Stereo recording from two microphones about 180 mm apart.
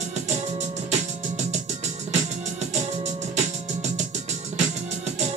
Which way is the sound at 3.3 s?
40° right (ahead or behind).